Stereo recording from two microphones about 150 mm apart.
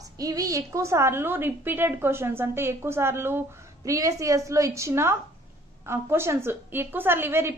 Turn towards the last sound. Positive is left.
turn(degrees=-15)  # may be behind; listen again after turning